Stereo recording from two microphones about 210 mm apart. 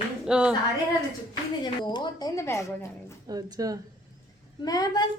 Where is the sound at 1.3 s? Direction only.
20° left (ahead or behind).